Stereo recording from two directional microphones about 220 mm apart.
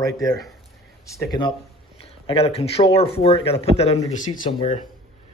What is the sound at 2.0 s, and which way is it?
Speech, 25° left (ahead or behind).